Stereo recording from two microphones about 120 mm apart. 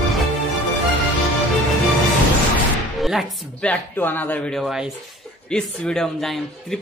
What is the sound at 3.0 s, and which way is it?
Music, centre (ahead or behind).